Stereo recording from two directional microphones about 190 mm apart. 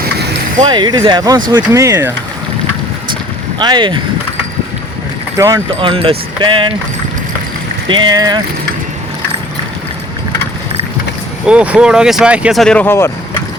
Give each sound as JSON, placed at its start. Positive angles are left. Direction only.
{"t": 0.0, "sound": "keys jangling", "side_deg": -55}
{"t": 0.6, "sound": "speech", "side_deg": -25}
{"t": 3.6, "sound": "speech", "side_deg": -25}
{"t": 5.7, "sound": "speech", "side_deg": -30}
{"t": 7.9, "sound": "speech", "side_deg": -25}
{"t": 11.4, "sound": "speech", "side_deg": -5}